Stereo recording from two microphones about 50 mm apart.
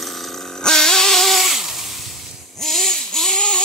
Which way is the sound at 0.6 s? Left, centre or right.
Centre.